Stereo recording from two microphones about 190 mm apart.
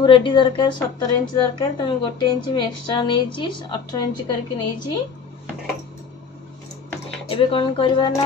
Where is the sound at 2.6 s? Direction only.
25° left (ahead or behind).